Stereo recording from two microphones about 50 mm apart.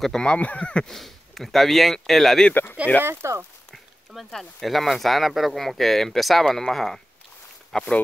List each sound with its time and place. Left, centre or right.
0.0 s speech: centre
0.8 s speech: centre
2.5 s speech: left
3.0 s speech: right
3.7 s speech: centre